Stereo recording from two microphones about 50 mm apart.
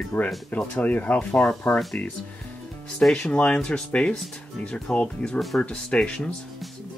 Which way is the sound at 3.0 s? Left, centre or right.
Centre.